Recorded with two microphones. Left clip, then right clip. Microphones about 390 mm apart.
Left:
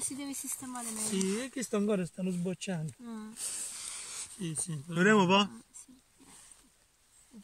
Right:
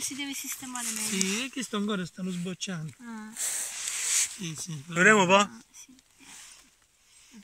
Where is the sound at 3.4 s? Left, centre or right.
Right.